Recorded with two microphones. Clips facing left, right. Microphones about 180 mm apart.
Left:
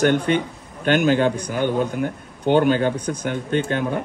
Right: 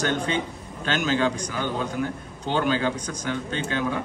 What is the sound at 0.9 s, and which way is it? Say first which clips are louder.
A man's voice: left 6 dB; 55° left (ahead or behind).